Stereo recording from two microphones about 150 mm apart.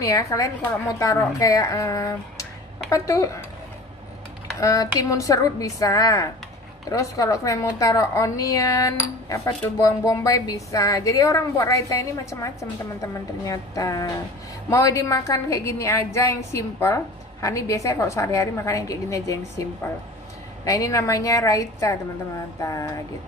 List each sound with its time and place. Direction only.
0.0 s a woman's voice: 20° left (ahead or behind)
4.6 s a woman's voice: 20° left (ahead or behind)